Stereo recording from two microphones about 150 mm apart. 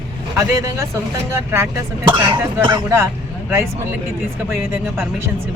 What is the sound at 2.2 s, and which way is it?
Speech, 30° right (ahead or behind).